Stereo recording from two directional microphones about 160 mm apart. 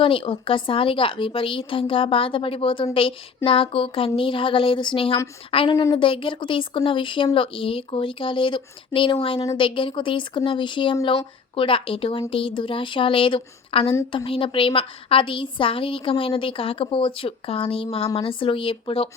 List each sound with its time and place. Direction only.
0.0 s a woman's voice: 35° left (ahead or behind)